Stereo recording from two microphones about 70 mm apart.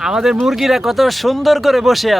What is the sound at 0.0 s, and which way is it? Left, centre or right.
Speech, centre.